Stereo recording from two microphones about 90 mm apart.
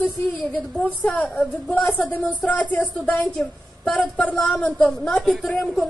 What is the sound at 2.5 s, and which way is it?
A woman's voice, 15° left (ahead or behind).